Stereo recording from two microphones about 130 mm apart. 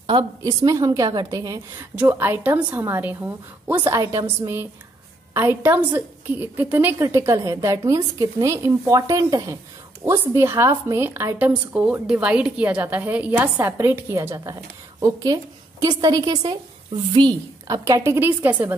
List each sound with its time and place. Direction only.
0.0 s a woman's voice: 40° right (ahead or behind)
0.4 s a woman's voice: 30° right (ahead or behind)
2.0 s a woman's voice: 15° right (ahead or behind)
3.9 s a woman's voice: 25° right (ahead or behind)